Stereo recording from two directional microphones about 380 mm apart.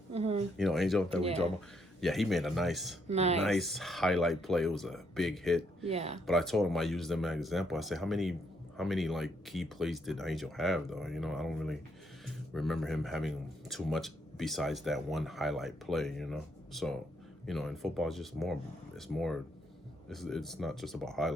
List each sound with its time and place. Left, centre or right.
0.1 s a sound: centre
0.5 s speech: centre
1.2 s speech: centre
2.0 s speech: centre
3.1 s speech: centre
3.4 s speech: centre
5.8 s speech: centre
6.2 s speech: centre